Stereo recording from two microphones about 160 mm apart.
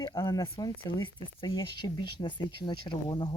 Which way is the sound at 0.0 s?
25° left (ahead or behind).